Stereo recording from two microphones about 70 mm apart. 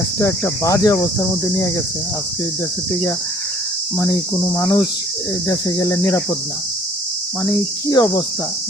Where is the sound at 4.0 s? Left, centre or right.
Left.